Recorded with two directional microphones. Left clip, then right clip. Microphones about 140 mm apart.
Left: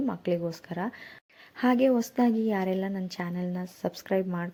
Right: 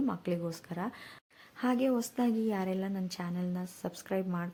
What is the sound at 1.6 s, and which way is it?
A woman's voice, 30° left (ahead or behind).